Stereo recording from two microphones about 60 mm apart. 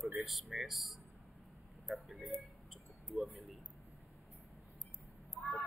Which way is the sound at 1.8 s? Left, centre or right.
Centre.